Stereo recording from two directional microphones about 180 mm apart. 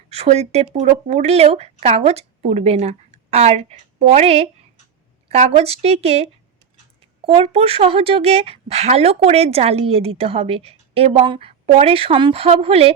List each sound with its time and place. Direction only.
0.1 s a woman's voice: 35° right (ahead or behind)